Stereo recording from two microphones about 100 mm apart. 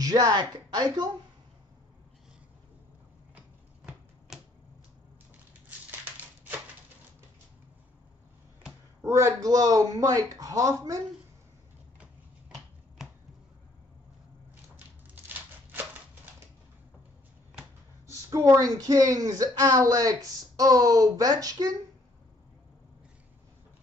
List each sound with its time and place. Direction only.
0.0 s speech: 40° right (ahead or behind)
3.3 s a sound: 5° right (ahead or behind)
9.0 s speech: 30° right (ahead or behind)
12.5 s finger snapping: centre (ahead or behind)
15.2 s a sound: 20° right (ahead or behind)
18.0 s speech: 35° right (ahead or behind)